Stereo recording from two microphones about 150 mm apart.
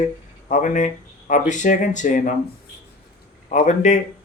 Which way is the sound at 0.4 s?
60° left (ahead or behind).